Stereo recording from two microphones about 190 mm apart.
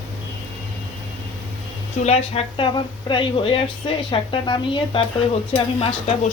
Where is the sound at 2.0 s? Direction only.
30° left (ahead or behind).